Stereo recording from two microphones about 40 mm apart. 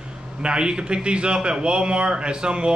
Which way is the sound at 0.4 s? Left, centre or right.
Right.